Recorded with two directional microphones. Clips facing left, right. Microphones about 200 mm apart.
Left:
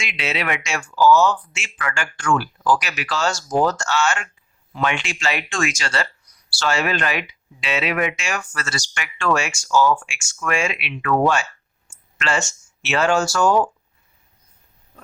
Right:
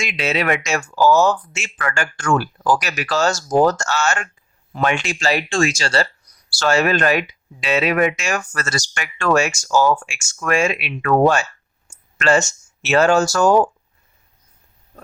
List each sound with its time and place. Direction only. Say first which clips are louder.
0.0 s speech: right 5 dB; 40° right (ahead or behind)
6.6 s speech: right 5 dB; 45° right (ahead or behind)